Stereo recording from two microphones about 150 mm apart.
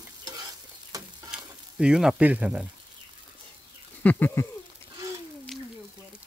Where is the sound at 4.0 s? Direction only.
10° left (ahead or behind).